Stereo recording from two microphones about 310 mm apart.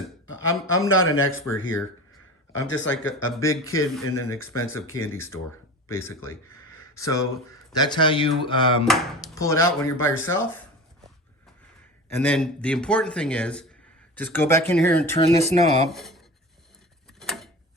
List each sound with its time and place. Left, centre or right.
0.3 s speech: left
3.3 s speech: centre
4.9 s speech: left
5.1 s speech: centre
12.0 s speech: centre
15.4 s speech: right
15.9 s speech: centre
17.2 s a sound: centre